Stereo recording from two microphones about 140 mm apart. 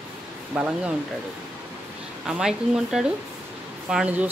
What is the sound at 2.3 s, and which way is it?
Speech, 5° right (ahead or behind).